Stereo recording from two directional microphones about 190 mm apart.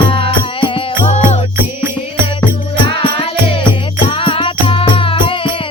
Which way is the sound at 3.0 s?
30° left (ahead or behind).